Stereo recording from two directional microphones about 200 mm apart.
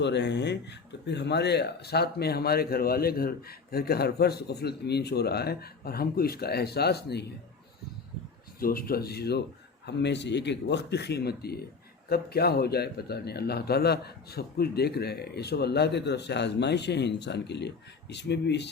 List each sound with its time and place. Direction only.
0.0 s speech: 60° left (ahead or behind)
8.5 s speech: 45° left (ahead or behind)